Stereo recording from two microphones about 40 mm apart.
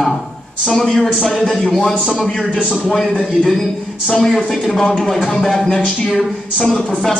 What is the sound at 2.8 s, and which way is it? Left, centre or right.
Speech, centre.